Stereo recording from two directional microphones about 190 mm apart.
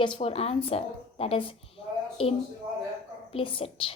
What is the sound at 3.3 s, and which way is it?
Speech, 30° left (ahead or behind).